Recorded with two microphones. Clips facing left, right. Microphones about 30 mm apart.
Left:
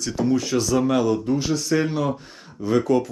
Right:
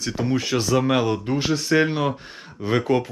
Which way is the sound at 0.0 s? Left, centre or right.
Right.